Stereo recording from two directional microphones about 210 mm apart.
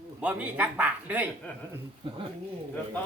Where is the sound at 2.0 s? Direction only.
25° right (ahead or behind).